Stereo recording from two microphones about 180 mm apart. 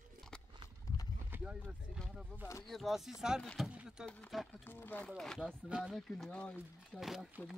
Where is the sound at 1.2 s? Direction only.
10° right (ahead or behind).